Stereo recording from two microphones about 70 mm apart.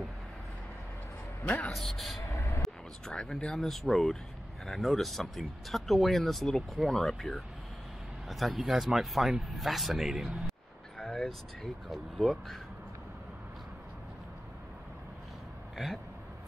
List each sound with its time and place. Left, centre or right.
1.7 s speech: centre
2.2 s a sound: left
3.1 s speech: centre
15.7 s speech: centre